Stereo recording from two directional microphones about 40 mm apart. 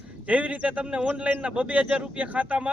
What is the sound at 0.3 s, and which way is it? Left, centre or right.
Speech, right.